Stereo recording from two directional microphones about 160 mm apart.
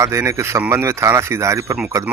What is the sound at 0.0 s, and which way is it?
Speech, 15° right (ahead or behind).